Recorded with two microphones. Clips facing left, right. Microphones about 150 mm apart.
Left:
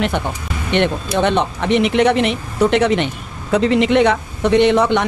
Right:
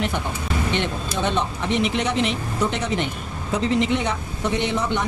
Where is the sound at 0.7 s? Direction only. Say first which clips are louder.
Left 8 dB; 65° left (ahead or behind).